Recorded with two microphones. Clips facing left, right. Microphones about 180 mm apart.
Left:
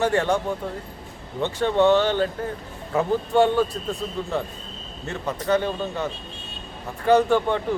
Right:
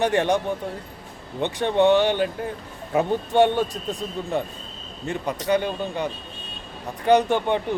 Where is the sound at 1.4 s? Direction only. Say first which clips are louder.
Even; 20° right (ahead or behind).